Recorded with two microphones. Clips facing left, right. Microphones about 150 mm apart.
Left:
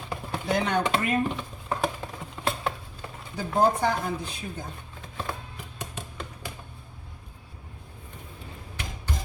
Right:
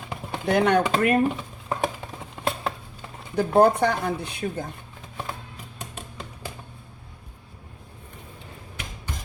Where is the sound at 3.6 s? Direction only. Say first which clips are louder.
Right 4 dB; 70° right (ahead or behind).